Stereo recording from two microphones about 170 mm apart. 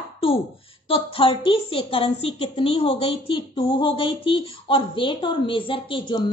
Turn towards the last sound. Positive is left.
turn(degrees=30)  # may be behind; listen again after turning